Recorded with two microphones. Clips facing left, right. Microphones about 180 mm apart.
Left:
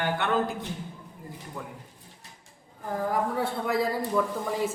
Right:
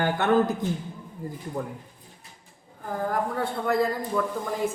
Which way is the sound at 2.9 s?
Centre (ahead or behind).